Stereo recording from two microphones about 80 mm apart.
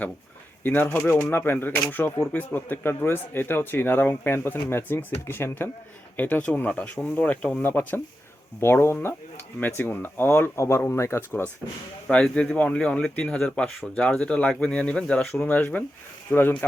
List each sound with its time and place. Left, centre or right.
0.6 s speech: left
12.1 s speech: centre